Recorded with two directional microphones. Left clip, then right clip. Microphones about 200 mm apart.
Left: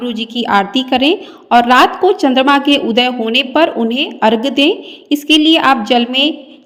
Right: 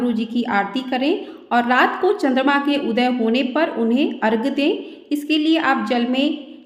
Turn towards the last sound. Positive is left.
turn(degrees=35)  # may be behind; listen again after turning